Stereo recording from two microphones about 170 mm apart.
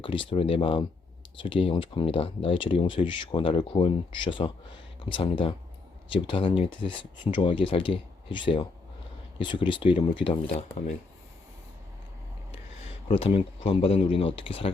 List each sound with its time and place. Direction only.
0.3 s speech: 30° left (ahead or behind)
13.1 s speech: 35° left (ahead or behind)